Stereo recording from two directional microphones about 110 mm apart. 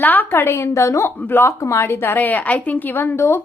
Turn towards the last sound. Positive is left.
turn(degrees=20)  # may be behind; listen again after turning